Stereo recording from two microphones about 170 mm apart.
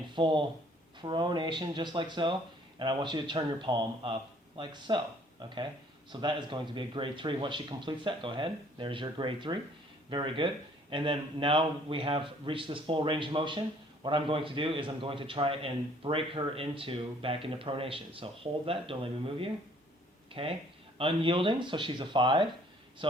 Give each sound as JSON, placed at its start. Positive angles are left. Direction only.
{"t": 0.2, "sound": "a man's voice", "side_deg": -30}
{"t": 20.3, "sound": "speech", "side_deg": -30}